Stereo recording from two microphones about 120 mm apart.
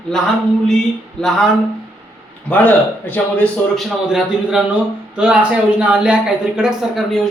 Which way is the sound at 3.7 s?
5° right (ahead or behind).